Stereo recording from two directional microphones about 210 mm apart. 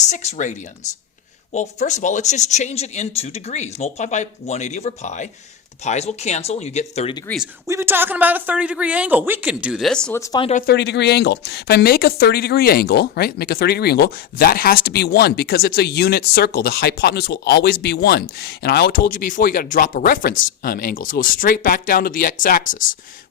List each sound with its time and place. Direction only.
0.1 s speech: 35° left (ahead or behind)
1.5 s speech: 35° left (ahead or behind)
7.7 s speech: 10° right (ahead or behind)
10.2 s speech: 15° left (ahead or behind)
10.7 s speech: 55° left (ahead or behind)